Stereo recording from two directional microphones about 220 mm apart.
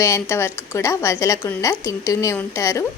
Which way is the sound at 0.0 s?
10° left (ahead or behind).